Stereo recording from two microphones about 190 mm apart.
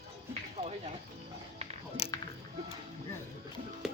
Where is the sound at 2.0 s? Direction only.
30° left (ahead or behind).